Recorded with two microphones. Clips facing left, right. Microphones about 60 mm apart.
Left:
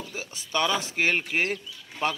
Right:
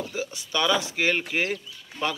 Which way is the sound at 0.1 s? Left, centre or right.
Left.